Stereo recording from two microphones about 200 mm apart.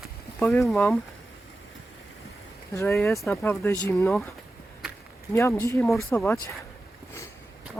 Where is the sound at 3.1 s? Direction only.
Centre (ahead or behind).